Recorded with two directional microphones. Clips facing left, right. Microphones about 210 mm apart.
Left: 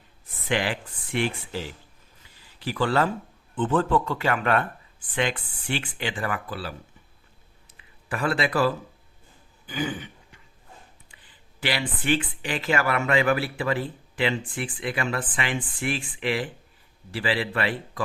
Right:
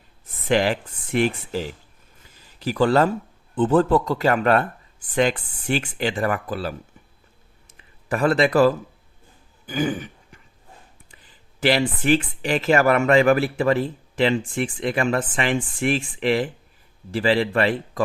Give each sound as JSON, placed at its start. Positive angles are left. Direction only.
{"t": 0.4, "sound": "speech", "side_deg": -40}
{"t": 2.3, "sound": "a sound", "side_deg": -40}
{"t": 3.5, "sound": "speech", "side_deg": -35}
{"t": 7.7, "sound": "a sound", "side_deg": -45}
{"t": 9.6, "sound": "throat clearing", "side_deg": -45}
{"t": 11.6, "sound": "speech", "side_deg": -40}